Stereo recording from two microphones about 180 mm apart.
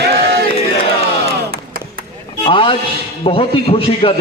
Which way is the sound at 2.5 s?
30° left (ahead or behind).